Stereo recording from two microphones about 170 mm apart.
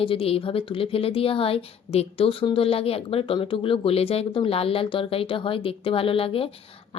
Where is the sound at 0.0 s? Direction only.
35° left (ahead or behind).